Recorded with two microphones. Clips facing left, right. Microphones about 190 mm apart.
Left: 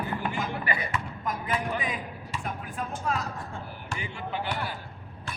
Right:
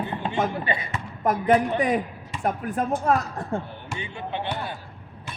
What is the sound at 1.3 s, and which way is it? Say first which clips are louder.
A woman's voice: right 11 dB; 65° right (ahead or behind).